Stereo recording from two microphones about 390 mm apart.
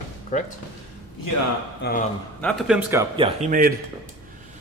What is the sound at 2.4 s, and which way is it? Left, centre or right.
A man's voice, centre.